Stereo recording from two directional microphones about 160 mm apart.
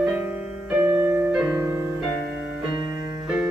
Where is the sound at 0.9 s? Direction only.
15° right (ahead or behind).